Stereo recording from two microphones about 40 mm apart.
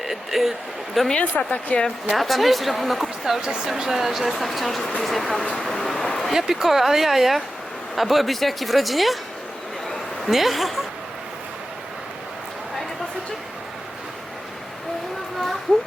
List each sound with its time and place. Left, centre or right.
0.1 s a woman's voice: centre
1.2 s speech: left
2.0 s a woman's voice: centre
5.6 s vehicle: centre
6.3 s a woman's voice: centre
10.2 s a woman's voice: centre